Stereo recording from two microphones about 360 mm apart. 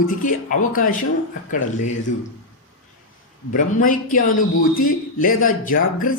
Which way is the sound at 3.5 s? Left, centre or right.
Left.